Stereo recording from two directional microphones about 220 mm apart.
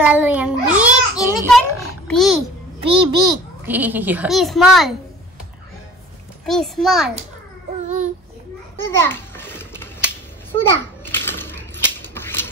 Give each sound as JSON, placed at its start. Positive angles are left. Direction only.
{"t": 0.0, "sound": "a child's voice", "side_deg": -5}
{"t": 2.8, "sound": "a child's voice", "side_deg": -20}
{"t": 3.6, "sound": "speech", "side_deg": -10}
{"t": 6.4, "sound": "a child's voice", "side_deg": 0}
{"t": 8.8, "sound": "a sound", "side_deg": 10}
{"t": 12.1, "sound": "typewriter", "side_deg": 10}